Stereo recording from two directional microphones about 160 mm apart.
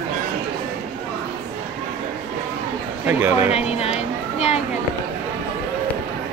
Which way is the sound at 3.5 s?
40° left (ahead or behind).